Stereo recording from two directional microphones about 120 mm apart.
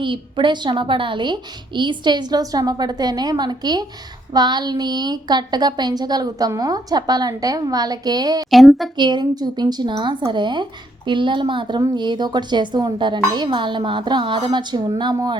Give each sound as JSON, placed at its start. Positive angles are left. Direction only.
{"t": 0.0, "sound": "a woman's voice", "side_deg": -45}
{"t": 8.4, "sound": "a woman's voice", "side_deg": 0}
{"t": 9.0, "sound": "a woman's voice", "side_deg": -40}